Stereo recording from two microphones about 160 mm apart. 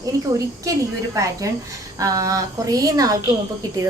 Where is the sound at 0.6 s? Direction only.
20° right (ahead or behind).